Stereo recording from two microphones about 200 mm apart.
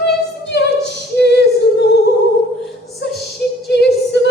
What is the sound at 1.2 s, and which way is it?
Female singing, 60° left (ahead or behind).